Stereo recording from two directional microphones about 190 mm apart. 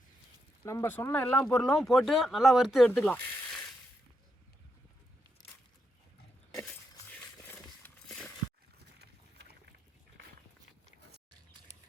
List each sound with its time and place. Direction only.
0.6 s speech: 15° left (ahead or behind)
7.2 s a sound: 5° left (ahead or behind)
9.0 s boat: 60° right (ahead or behind)